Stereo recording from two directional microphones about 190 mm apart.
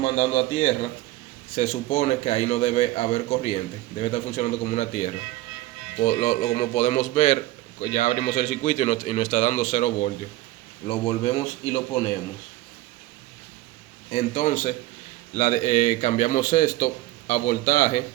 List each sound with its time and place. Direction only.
0.0 s a man's voice: 35° left (ahead or behind)
11.2 s a man's voice: 25° left (ahead or behind)
14.1 s a man's voice: 40° left (ahead or behind)